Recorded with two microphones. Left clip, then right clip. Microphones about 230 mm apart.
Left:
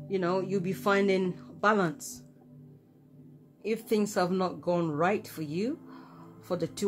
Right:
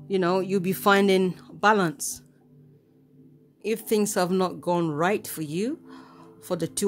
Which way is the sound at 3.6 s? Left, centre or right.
Right.